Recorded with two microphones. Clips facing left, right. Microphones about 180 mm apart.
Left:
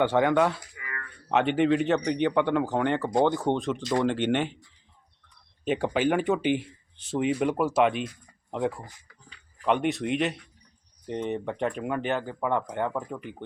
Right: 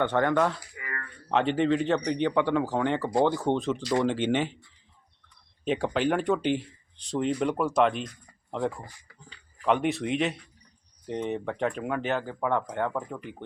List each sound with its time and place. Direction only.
0.0 s speech: 10° left (ahead or behind)
0.8 s a sound: 30° right (ahead or behind)
1.3 s speech: 5° left (ahead or behind)
5.6 s speech: centre (ahead or behind)